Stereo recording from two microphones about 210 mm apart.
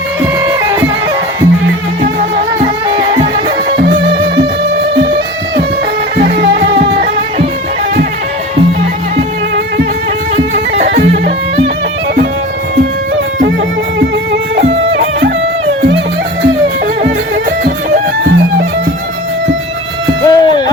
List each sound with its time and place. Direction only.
0.4 s music: 15° right (ahead or behind)
3.3 s music: 50° right (ahead or behind)
6.1 s music: 50° right (ahead or behind)
10.5 s music: 55° right (ahead or behind)
20.2 s a sound: 20° left (ahead or behind)